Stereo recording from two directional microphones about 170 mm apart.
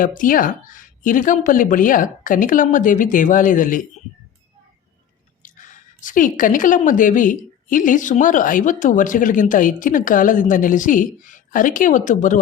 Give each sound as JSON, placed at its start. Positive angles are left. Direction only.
{"t": 0.0, "sound": "a woman's voice", "side_deg": 50}
{"t": 5.4, "sound": "a woman's voice", "side_deg": 50}